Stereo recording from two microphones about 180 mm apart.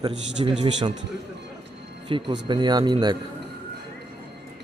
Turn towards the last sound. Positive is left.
turn(degrees=-25)  # may be behind; listen again after turning